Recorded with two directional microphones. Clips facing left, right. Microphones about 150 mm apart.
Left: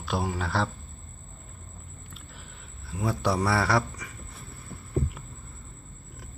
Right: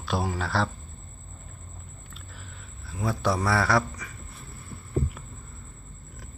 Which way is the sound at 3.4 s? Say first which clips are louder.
Right 1 dB; 25° left (ahead or behind).